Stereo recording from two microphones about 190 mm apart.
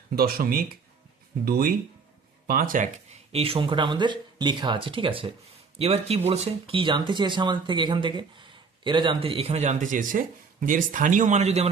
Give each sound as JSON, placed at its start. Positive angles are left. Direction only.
{"t": 0.2, "sound": "speech", "side_deg": -55}